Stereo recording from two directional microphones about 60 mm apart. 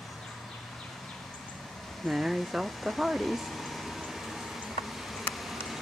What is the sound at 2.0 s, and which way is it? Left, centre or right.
Speech, centre.